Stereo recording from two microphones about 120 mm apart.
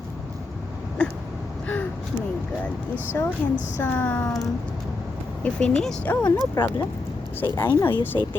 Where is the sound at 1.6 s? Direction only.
15° left (ahead or behind).